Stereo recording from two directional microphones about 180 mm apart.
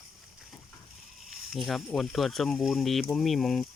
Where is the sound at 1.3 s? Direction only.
Centre (ahead or behind).